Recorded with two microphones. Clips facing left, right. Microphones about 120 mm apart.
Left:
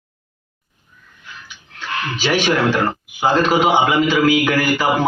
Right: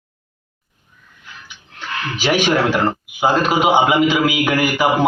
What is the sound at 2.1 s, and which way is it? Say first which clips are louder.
A man's voice: right 1 dB; 15° right (ahead or behind).